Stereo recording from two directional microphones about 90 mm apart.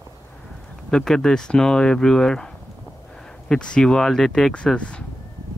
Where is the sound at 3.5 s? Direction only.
10° left (ahead or behind).